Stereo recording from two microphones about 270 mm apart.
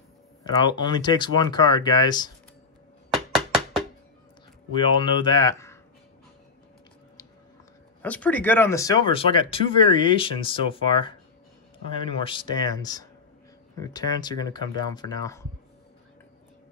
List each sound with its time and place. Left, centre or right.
0.4 s speech: centre
3.1 s a sound: centre
4.7 s speech: centre
8.0 s speech: centre